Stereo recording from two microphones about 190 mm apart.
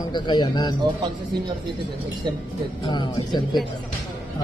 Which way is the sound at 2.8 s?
25° left (ahead or behind).